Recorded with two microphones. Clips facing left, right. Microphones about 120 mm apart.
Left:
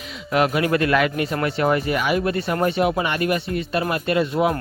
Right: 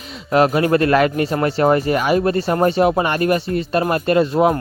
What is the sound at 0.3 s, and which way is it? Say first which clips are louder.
Speech: right 5 dB; 35° right (ahead or behind).